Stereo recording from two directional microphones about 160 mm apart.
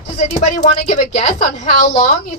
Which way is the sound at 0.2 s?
45° left (ahead or behind).